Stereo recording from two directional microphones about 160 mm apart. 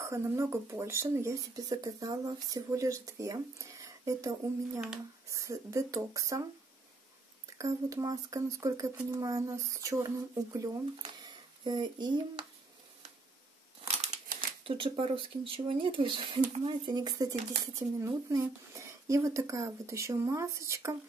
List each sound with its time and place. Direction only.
0.0 s speech: 15° right (ahead or behind)
4.7 s speech: 5° right (ahead or behind)
5.3 s speech: 20° right (ahead or behind)
7.4 s speech: 20° right (ahead or behind)
13.8 s speech: 45° right (ahead or behind); by 20.9 s 20° right (ahead or behind)